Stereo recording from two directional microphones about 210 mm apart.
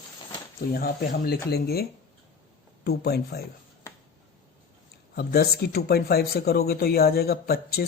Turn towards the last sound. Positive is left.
turn(degrees=45)  # may be behind; listen again after turning